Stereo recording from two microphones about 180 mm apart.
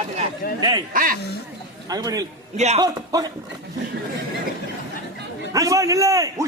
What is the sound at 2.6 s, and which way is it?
Speech, 35° right (ahead or behind).